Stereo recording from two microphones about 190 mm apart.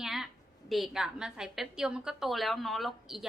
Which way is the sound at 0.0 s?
Centre (ahead or behind).